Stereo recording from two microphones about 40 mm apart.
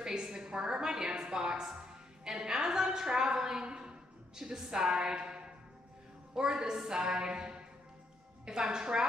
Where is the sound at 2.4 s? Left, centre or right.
Centre.